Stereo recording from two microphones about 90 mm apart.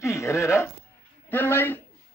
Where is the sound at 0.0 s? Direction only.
35° left (ahead or behind).